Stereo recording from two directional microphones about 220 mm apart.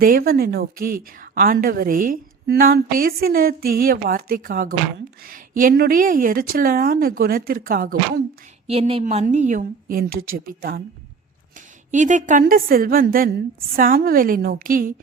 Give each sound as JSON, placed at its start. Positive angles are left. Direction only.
{"t": 0.0, "sound": "a woman's voice", "side_deg": -40}
{"t": 8.6, "sound": "a woman's voice", "side_deg": -25}
{"t": 11.9, "sound": "a woman's voice", "side_deg": -35}